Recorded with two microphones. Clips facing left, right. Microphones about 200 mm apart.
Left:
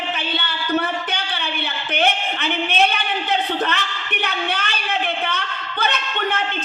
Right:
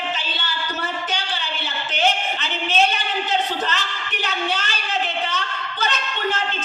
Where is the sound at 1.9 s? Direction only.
60° left (ahead or behind).